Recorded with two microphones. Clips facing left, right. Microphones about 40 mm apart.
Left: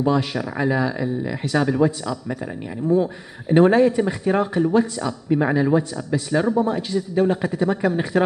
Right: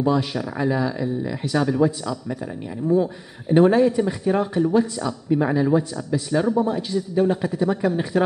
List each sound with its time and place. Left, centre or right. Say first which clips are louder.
0.0 s speech: left 1 dB; centre
5.3 s speech: left 1 dB; centre
6.5 s speech: left 1 dB; centre